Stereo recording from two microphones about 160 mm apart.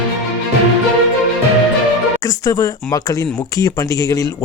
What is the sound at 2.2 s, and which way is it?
A man's voice, 20° left (ahead or behind).